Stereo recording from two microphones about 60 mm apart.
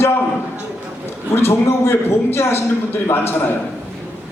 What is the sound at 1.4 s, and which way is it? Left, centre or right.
A man's voice, left.